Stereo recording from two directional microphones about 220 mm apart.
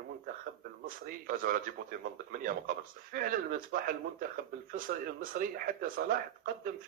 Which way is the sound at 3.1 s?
40° right (ahead or behind).